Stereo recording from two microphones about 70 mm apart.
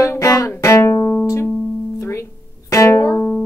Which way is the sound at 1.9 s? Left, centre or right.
Left.